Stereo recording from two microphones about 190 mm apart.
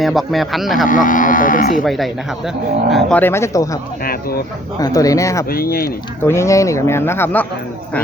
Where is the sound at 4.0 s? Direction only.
50° left (ahead or behind).